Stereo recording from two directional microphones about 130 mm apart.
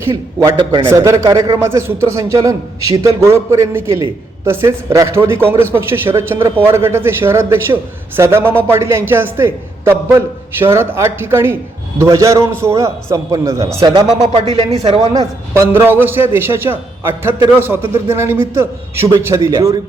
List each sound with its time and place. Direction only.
0.0 s a man's voice: 25° right (ahead or behind)
15.5 s a man's voice: 20° right (ahead or behind)